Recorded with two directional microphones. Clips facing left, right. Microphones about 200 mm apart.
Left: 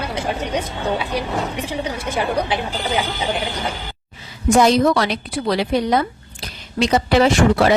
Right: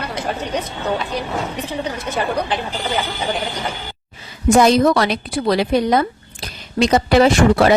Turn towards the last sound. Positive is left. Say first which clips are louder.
# right 2 dB
turn(degrees=-45)  # may be behind; listen again after turning